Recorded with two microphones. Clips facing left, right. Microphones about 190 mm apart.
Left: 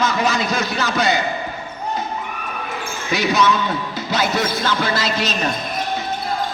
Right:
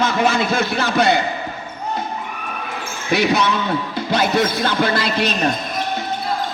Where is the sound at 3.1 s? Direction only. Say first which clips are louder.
Right 1 dB; 60° right (ahead or behind).